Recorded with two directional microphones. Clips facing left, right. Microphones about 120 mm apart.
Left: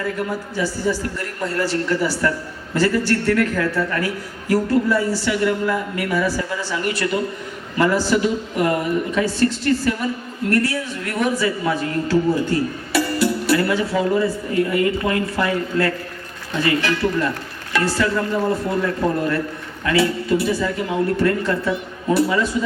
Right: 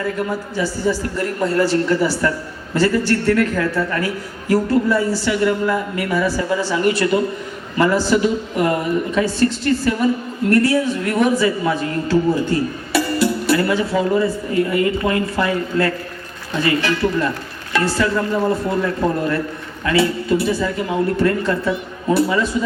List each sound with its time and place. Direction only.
0.0 s a man's voice: 25° right (ahead or behind)